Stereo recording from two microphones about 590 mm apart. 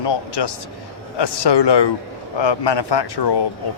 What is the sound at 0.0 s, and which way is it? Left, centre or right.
A man's voice, left.